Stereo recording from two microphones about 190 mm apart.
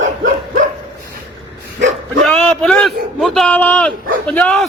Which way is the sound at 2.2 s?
Centre (ahead or behind).